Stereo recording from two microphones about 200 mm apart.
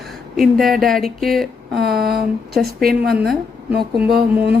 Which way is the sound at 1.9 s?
50° right (ahead or behind).